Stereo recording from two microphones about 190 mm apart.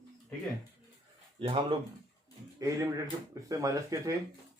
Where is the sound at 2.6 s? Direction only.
15° right (ahead or behind).